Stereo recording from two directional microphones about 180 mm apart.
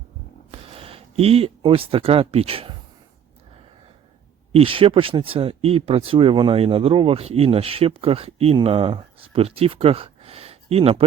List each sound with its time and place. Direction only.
0.7 s speech: 30° right (ahead or behind)
4.5 s speech: 30° right (ahead or behind)